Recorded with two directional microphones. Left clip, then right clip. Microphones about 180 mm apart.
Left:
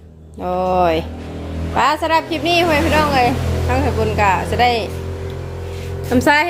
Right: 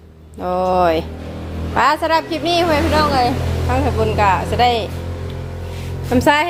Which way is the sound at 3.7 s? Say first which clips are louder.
Right 1 dB; centre (ahead or behind).